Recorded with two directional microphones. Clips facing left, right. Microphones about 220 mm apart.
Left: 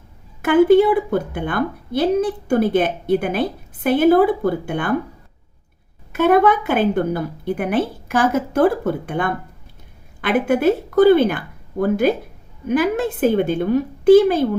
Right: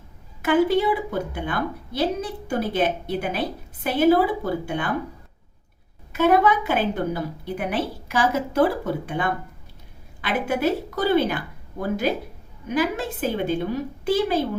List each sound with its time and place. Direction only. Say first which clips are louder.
0.4 s a woman's voice: left 7 dB; 55° left (ahead or behind)
6.1 s a woman's voice: left 4 dB; 55° left (ahead or behind)